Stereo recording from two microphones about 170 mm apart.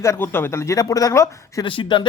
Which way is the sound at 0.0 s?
15° left (ahead or behind).